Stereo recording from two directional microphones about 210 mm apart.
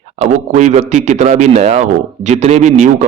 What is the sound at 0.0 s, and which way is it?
A man's voice, 35° right (ahead or behind).